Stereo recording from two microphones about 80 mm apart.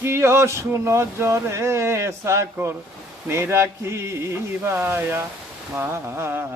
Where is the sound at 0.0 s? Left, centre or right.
Right.